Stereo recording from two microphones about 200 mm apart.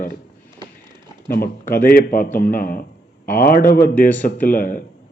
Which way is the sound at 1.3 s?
45° left (ahead or behind).